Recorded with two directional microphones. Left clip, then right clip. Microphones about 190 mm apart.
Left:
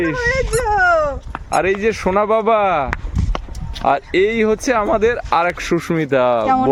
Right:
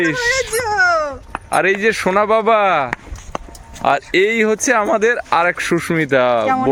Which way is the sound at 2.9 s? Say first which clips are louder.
Even; 20° right (ahead or behind).